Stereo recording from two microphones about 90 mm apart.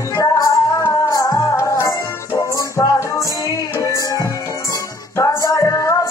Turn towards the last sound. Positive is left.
turn(degrees=35)  # may be behind; listen again after turning